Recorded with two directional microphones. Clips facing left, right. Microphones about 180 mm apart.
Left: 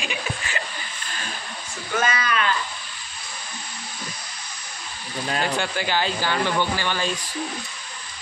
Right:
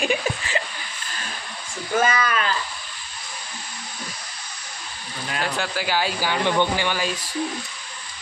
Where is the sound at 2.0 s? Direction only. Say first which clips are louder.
Right 2 dB; 35° right (ahead or behind).